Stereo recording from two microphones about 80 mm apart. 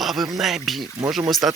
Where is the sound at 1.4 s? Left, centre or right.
Centre.